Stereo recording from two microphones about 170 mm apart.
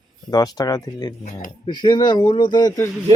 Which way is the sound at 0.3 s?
25° left (ahead or behind).